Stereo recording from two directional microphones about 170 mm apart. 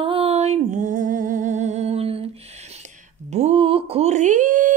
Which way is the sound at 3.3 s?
40° right (ahead or behind).